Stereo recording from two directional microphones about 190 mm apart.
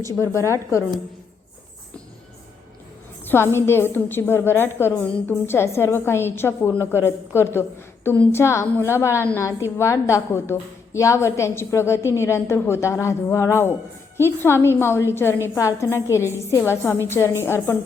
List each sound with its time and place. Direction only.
0.3 s a woman's voice: 15° left (ahead or behind)
3.2 s a woman's voice: 10° left (ahead or behind)